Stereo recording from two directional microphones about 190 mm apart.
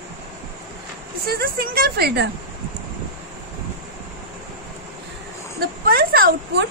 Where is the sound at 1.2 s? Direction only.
50° right (ahead or behind).